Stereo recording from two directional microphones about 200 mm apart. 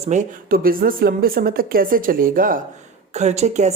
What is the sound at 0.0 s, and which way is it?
A woman's voice, 35° right (ahead or behind).